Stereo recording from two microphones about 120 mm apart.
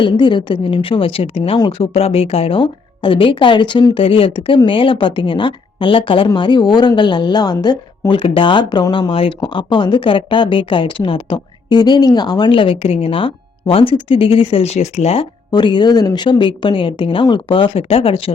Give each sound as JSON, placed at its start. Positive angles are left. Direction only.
{"t": 0.0, "sound": "speech", "side_deg": 40}
{"t": 8.2, "sound": "speech", "side_deg": 50}
{"t": 15.5, "sound": "speech", "side_deg": 40}